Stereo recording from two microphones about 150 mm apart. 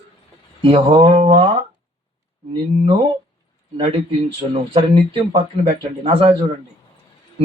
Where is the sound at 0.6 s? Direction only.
40° right (ahead or behind).